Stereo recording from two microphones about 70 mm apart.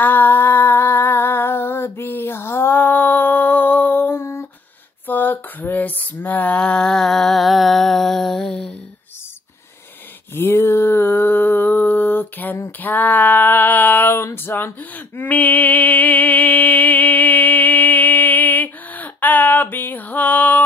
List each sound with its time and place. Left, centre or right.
0.0 s humming: left
5.0 s a sound: left; by 8.7 s centre
10.3 s mantra: left
12.8 s female singing: left